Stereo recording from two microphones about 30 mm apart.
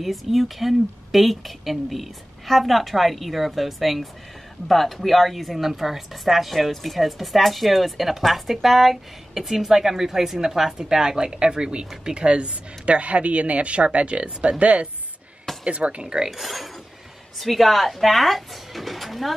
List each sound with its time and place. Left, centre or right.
0.0 s a woman's voice: centre; by 16.3 s right
16.3 s a woman's voice: centre